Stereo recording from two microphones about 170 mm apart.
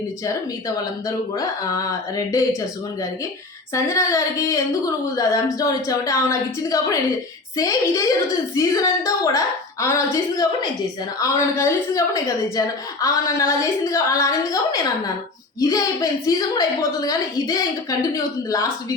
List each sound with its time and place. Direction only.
1.4 s a woman's voice: 20° left (ahead or behind)
3.8 s a woman's voice: 20° left (ahead or behind)